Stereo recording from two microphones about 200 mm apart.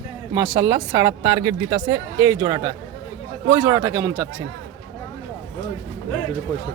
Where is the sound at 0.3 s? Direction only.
20° right (ahead or behind).